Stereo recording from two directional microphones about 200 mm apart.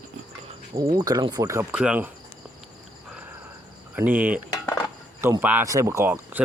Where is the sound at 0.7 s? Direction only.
20° right (ahead or behind).